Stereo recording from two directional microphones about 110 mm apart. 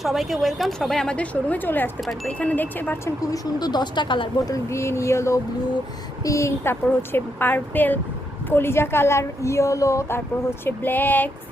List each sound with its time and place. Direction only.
0.0 s a woman's voice: centre (ahead or behind); by 3.0 s 15° left (ahead or behind)
3.3 s speech: 40° left (ahead or behind)
4.5 s a woman's voice: 25° left (ahead or behind)
10.7 s speech: 15° left (ahead or behind)